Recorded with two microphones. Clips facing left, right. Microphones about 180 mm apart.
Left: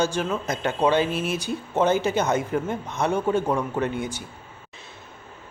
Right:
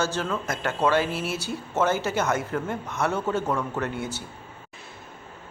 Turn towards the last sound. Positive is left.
turn(degrees=15)  # may be behind; listen again after turning